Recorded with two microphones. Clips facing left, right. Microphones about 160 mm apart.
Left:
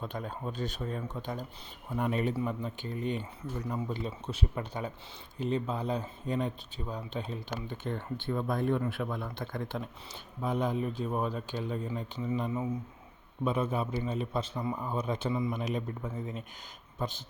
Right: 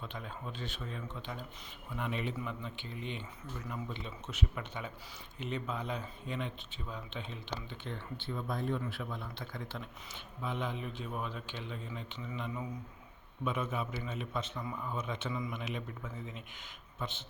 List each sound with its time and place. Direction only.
0.0 s a man's voice: 45° left (ahead or behind)